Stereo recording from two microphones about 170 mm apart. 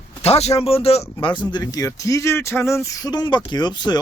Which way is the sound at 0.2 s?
40° left (ahead or behind).